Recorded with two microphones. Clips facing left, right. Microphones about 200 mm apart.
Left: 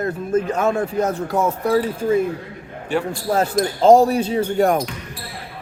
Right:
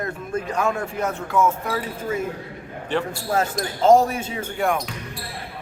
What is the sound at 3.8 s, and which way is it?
Speech, 35° left (ahead or behind).